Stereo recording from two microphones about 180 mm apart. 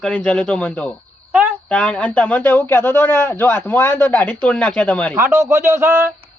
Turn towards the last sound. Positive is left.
turn(degrees=-10)  # may be behind; listen again after turning